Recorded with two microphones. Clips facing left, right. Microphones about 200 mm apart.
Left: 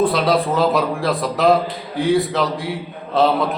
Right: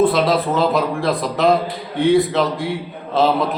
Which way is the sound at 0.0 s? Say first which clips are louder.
Right 1 dB; centre (ahead or behind).